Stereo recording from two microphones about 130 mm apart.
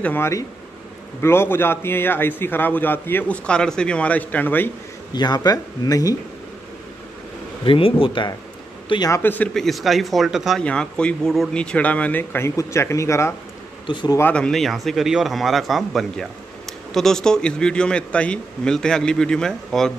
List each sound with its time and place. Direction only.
0.0 s a man's voice: 15° left (ahead or behind)
5.1 s speech: 35° left (ahead or behind)
7.6 s speech: 45° left (ahead or behind)
9.1 s a man's voice: 15° left (ahead or behind)
9.5 s a man's voice: centre (ahead or behind); by 13.3 s 20° left (ahead or behind)
13.9 s speech: 35° left (ahead or behind)
14.3 s a man's voice: 5° left (ahead or behind)